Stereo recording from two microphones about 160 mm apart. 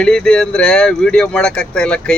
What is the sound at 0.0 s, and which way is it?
Speech, 5° left (ahead or behind).